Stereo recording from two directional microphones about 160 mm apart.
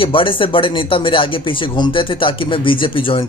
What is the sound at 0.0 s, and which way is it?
Speech, 35° left (ahead or behind).